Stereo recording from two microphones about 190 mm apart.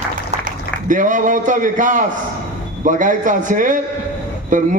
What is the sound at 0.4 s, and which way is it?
A man's voice, 45° right (ahead or behind).